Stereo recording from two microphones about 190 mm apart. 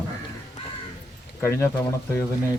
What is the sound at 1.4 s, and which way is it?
Speech, 15° left (ahead or behind).